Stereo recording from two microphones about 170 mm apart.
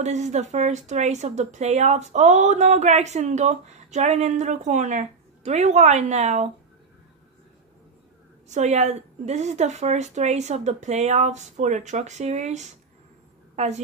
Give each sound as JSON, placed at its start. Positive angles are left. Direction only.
{"t": 0.0, "sound": "speech", "side_deg": -45}
{"t": 8.5, "sound": "a woman's voice", "side_deg": -40}